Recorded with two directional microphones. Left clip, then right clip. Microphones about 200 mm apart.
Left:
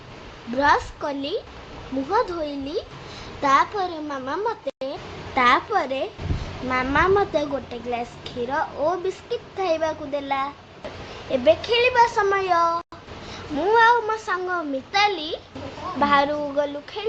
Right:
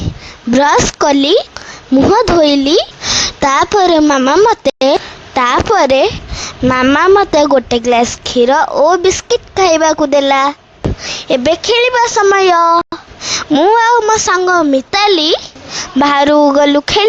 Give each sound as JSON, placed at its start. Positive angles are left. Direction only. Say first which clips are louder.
{"t": 0.6, "sound": "a woman's voice", "louder": "right 10 dB", "side_deg": -55}
{"t": 13.3, "sound": "a woman's voice", "louder": "right 11 dB", "side_deg": -55}